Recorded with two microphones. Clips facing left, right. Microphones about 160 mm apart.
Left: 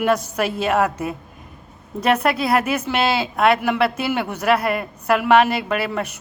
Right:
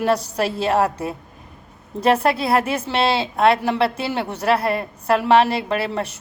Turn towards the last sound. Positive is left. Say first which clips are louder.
# even
turn(degrees=-30)  # may be behind; listen again after turning